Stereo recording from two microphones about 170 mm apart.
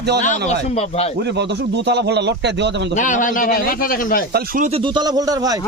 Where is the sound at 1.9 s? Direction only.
85° right.